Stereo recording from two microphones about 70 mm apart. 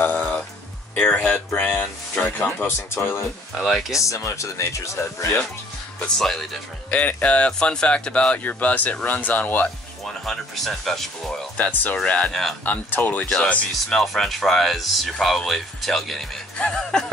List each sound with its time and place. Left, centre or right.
0.0 s music: left
0.9 s speech: centre
3.5 s speech: centre
3.9 s speech: left
5.9 s speech: centre
6.9 s speech: centre
10.0 s speech: centre
11.5 s speech: left
12.3 s speech: centre
12.6 s speech: left
13.8 s speech: centre
16.5 s speech: centre